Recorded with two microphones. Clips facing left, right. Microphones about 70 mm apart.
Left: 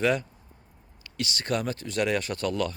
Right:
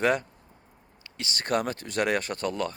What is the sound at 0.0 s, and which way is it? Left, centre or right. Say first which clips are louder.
Speech: even; right.